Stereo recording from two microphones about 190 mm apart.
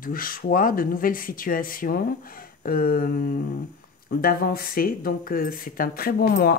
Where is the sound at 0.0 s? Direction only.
45° left (ahead or behind).